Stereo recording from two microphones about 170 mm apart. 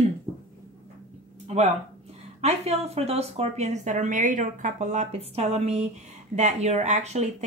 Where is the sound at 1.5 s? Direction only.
40° right (ahead or behind).